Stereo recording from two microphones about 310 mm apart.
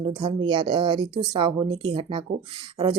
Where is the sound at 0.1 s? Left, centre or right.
Centre.